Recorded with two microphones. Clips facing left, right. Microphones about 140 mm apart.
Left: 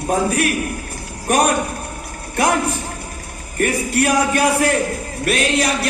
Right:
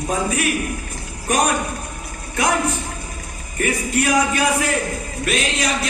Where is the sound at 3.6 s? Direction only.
60° left (ahead or behind).